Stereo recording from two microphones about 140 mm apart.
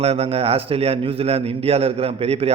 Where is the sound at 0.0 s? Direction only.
45° right (ahead or behind).